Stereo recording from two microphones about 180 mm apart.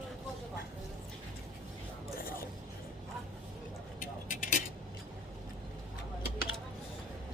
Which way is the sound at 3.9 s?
50° left (ahead or behind).